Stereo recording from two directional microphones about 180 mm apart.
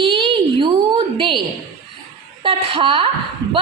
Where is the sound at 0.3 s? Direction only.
30° right (ahead or behind).